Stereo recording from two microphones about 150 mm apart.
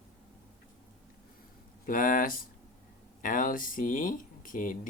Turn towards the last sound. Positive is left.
turn(degrees=65)  # may be behind; listen again after turning